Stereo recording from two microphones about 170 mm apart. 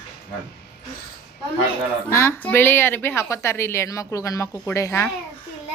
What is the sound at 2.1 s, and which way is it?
A woman's voice, 10° left (ahead or behind).